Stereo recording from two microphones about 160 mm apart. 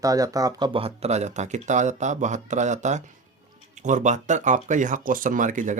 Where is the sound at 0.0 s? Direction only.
20° right (ahead or behind).